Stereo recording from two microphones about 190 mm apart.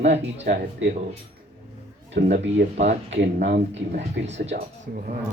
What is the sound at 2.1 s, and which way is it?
Speech, 70° right (ahead or behind).